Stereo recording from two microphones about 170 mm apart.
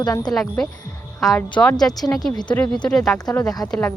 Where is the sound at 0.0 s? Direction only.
25° left (ahead or behind).